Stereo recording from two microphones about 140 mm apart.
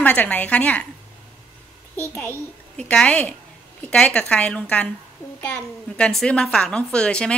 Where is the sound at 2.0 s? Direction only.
15° left (ahead or behind).